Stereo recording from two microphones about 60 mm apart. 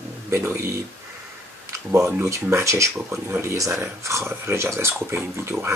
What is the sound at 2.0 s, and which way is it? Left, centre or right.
Speech, right.